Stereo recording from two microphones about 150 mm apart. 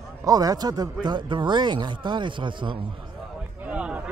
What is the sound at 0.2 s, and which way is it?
Speech, 25° right (ahead or behind).